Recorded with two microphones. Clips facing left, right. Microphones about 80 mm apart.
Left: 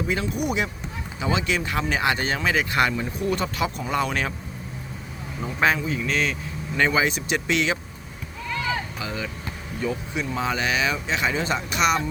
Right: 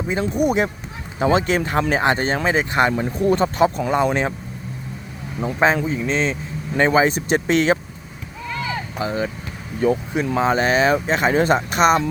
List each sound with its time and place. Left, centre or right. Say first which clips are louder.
0.3 s speech: right 7 dB; right
3.9 s speech: right 6 dB; right
5.5 s speech: right 4 dB; right
9.0 s speech: right 8 dB; right
9.8 s speech: right 8 dB; right
10.3 s speech: right 8 dB; right